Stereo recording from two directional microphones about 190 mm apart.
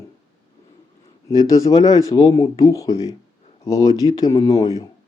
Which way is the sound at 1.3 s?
20° left (ahead or behind).